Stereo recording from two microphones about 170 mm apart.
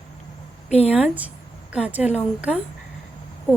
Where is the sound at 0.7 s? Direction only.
40° left (ahead or behind).